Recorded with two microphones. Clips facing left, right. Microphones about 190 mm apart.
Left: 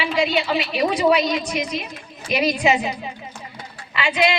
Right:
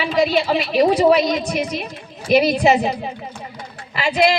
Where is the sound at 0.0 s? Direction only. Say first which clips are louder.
Right 3 dB; 35° right (ahead or behind).